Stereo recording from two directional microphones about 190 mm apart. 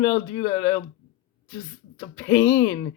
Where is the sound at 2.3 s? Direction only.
15° left (ahead or behind).